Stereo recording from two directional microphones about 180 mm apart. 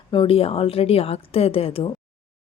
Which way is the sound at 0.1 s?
30° left (ahead or behind).